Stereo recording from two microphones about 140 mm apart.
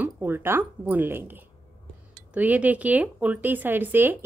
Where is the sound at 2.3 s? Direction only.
10° right (ahead or behind).